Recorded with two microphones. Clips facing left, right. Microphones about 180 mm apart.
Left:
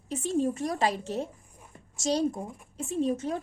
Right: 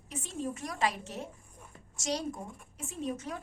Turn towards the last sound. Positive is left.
turn(degrees=30)  # may be behind; listen again after turning